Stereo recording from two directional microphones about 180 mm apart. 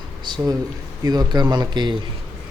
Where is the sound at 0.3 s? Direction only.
25° right (ahead or behind).